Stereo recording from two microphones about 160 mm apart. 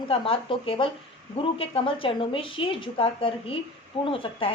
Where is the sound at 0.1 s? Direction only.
35° left (ahead or behind).